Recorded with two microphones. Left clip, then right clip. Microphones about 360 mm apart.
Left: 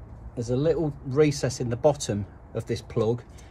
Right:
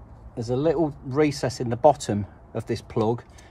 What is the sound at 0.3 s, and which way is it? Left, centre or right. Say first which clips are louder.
Speech: right 1 dB; centre.